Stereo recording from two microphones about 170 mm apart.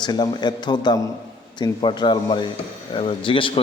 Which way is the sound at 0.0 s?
25° left (ahead or behind).